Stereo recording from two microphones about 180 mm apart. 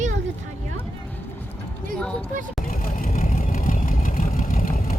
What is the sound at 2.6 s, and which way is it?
Vehicle, 50° left (ahead or behind).